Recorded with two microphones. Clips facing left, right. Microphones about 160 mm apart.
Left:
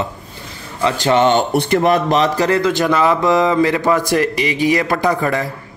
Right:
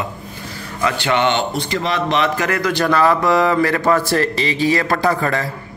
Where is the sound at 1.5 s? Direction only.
60° left (ahead or behind).